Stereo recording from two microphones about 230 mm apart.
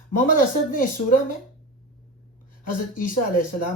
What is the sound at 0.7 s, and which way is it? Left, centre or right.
Speech, left.